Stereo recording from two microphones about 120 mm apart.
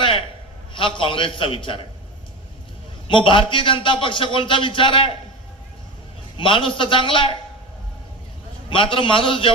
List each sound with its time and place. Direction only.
0.0 s a sound: 45° left (ahead or behind)
0.7 s a man's voice: 45° left (ahead or behind)
3.1 s a man's voice: 45° left (ahead or behind)
6.3 s a man's voice: 45° left (ahead or behind)
8.7 s a man's voice: 45° left (ahead or behind)